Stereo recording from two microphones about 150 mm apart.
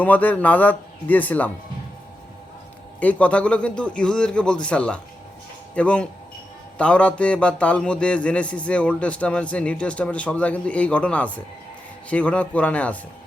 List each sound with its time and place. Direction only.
0.0 s a man's voice: 10° left (ahead or behind)
3.0 s a man's voice: 10° left (ahead or behind)